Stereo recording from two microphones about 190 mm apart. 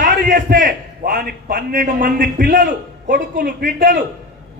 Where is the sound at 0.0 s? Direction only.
45° right (ahead or behind).